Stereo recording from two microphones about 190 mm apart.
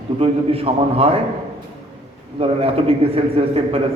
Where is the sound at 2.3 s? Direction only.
30° right (ahead or behind).